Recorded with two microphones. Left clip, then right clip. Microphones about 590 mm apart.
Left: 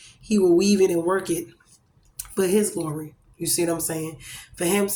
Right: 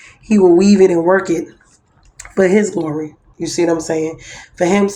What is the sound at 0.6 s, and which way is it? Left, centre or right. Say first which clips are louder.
Speech: right 9 dB; left.